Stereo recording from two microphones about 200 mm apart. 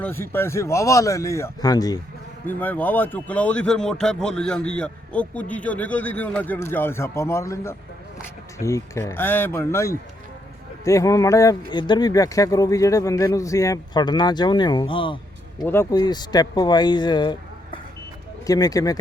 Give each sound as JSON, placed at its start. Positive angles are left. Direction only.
{"t": 0.0, "sound": "speech", "side_deg": 10}
{"t": 15.6, "sound": "speech", "side_deg": 15}